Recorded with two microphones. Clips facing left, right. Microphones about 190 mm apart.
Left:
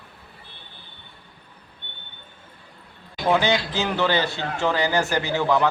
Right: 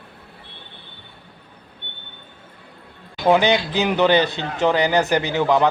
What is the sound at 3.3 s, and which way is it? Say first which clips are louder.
Speech: right 4 dB; 15° right (ahead or behind).